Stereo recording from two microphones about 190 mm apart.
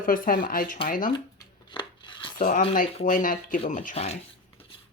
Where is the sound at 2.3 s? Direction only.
45° left (ahead or behind).